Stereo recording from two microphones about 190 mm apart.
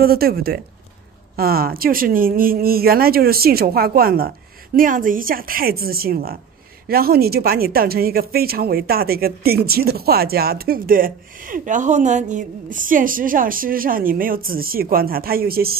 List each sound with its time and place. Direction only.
0.0 s speech: 50° right (ahead or behind)